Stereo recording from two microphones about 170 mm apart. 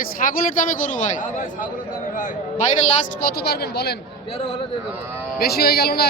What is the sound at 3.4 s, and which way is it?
Speech, 70° left (ahead or behind).